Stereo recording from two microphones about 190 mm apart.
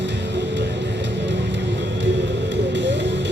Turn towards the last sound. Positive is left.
turn(degrees=-70)  # may be behind; listen again after turning